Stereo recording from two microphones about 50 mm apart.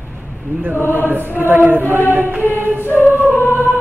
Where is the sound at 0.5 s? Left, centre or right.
Right.